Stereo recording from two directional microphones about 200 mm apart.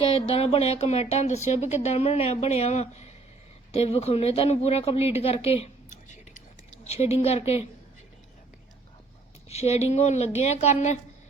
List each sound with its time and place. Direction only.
0.0 s speech: 30° left (ahead or behind)
9.5 s speech: 30° left (ahead or behind)